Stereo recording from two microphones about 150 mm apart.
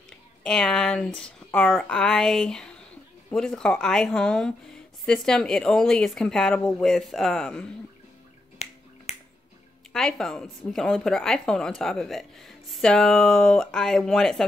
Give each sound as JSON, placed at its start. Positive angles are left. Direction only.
{"t": 0.4, "sound": "speech", "side_deg": 5}
{"t": 8.6, "sound": "finger snapping", "side_deg": 50}
{"t": 9.9, "sound": "speech", "side_deg": 0}